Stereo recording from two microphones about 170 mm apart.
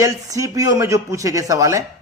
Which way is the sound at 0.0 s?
20° right (ahead or behind).